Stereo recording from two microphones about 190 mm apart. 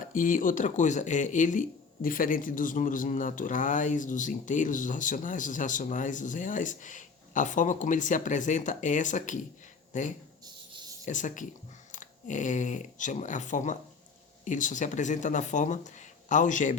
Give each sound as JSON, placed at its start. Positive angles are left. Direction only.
{"t": 0.1, "sound": "speech", "side_deg": 45}
{"t": 10.4, "sound": "a sound", "side_deg": -20}
{"t": 11.0, "sound": "speech", "side_deg": 40}